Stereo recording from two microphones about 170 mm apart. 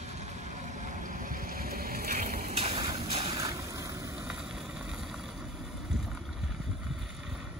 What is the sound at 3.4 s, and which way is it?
Boat, 20° right (ahead or behind).